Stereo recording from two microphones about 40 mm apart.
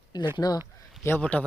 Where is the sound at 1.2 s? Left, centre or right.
Left.